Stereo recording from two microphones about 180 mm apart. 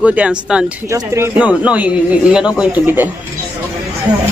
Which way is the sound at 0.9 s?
15° right (ahead or behind).